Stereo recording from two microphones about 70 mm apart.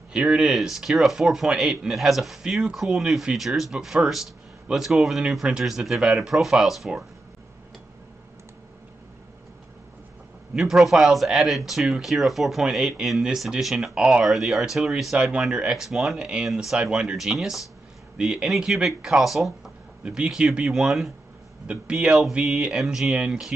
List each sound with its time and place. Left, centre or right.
0.1 s speech: centre
10.5 s speech: centre
16.2 s speech: centre